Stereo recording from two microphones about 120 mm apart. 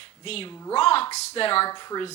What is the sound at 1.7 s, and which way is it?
Speech, 35° left (ahead or behind).